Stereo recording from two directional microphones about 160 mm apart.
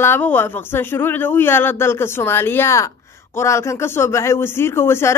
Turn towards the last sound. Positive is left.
turn(degrees=15)  # may be behind; listen again after turning